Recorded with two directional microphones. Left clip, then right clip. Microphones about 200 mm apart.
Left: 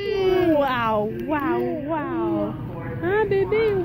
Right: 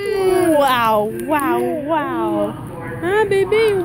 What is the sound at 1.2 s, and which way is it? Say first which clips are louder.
Speech: right 6 dB; 25° right (ahead or behind).